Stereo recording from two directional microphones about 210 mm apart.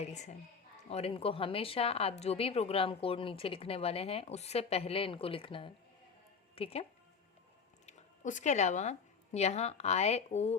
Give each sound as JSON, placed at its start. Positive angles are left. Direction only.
{"t": 0.0, "sound": "a woman's voice", "side_deg": 35}
{"t": 7.9, "sound": "speech", "side_deg": 35}